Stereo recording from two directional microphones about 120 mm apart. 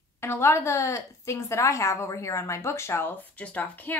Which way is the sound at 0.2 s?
20° left (ahead or behind).